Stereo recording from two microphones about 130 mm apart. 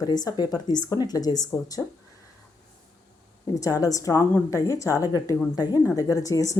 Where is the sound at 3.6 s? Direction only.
25° left (ahead or behind).